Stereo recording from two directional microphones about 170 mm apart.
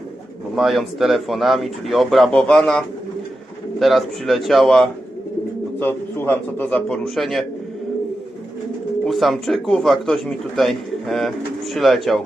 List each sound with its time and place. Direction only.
0.5 s a man's voice: centre (ahead or behind)
9.0 s speech: centre (ahead or behind)